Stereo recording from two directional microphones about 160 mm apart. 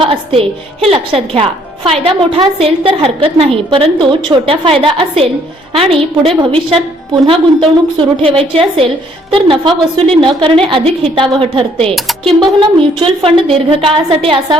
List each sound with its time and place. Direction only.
0.0 s a woman's voice: 35° right (ahead or behind)
11.9 s speech: centre (ahead or behind)
12.4 s a woman's voice: 30° right (ahead or behind)